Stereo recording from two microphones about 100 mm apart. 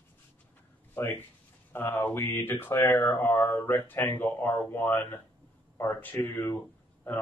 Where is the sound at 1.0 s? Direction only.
20° left (ahead or behind).